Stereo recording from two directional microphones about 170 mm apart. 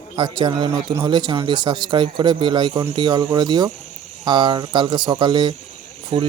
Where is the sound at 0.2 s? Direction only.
25° right (ahead or behind).